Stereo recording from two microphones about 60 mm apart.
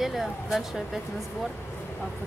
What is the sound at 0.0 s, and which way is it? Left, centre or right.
Speech, centre.